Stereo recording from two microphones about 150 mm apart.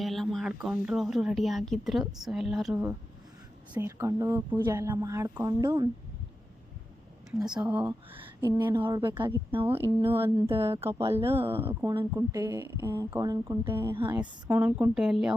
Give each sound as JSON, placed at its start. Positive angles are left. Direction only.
{"t": 0.0, "sound": "a woman's voice", "side_deg": 0}
{"t": 3.8, "sound": "a woman's voice", "side_deg": -20}
{"t": 7.3, "sound": "a woman's voice", "side_deg": -5}